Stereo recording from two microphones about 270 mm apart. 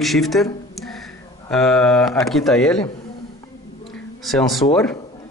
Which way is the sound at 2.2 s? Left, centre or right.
Centre.